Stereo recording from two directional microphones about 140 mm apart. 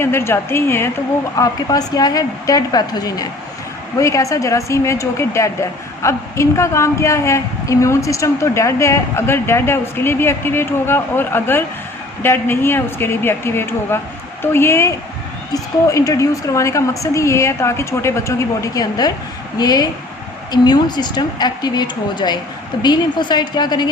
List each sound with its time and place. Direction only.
0.0 s speech: 15° left (ahead or behind)
1.4 s a woman's voice: 25° left (ahead or behind)